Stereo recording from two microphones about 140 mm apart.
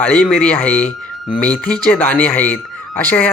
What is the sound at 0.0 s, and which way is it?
Speech, 10° left (ahead or behind).